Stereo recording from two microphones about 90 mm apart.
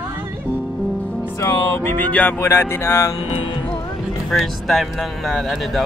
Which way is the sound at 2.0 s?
20° left (ahead or behind).